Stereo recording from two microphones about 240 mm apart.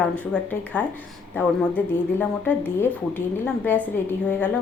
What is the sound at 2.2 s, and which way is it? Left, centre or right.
A woman's voice, centre.